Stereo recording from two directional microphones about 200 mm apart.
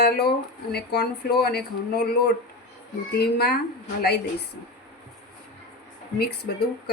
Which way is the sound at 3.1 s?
50° left (ahead or behind).